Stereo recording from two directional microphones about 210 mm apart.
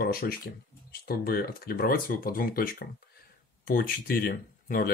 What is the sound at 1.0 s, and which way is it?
Speech, 45° left (ahead or behind).